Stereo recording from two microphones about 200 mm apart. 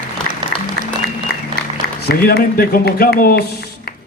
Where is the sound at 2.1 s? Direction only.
50° left (ahead or behind).